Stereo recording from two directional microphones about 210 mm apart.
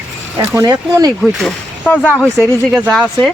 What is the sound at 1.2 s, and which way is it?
Speech, 5° left (ahead or behind).